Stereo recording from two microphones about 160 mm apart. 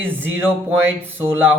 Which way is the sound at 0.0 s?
15° right (ahead or behind).